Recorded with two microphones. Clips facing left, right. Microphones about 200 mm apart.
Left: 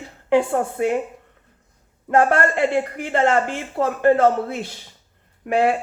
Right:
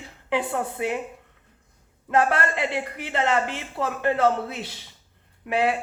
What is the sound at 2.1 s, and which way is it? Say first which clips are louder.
Speech: left 5 dB; 50° left (ahead or behind).